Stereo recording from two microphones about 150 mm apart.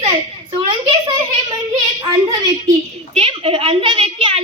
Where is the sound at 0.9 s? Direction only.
30° right (ahead or behind).